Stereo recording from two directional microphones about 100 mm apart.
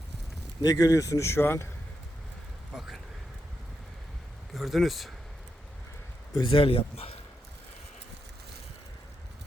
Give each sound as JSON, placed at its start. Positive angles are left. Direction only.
{"t": 0.6, "sound": "speech", "side_deg": 40}
{"t": 2.7, "sound": "a sound", "side_deg": -5}
{"t": 4.5, "sound": "speech", "side_deg": 0}
{"t": 6.5, "sound": "speech", "side_deg": 65}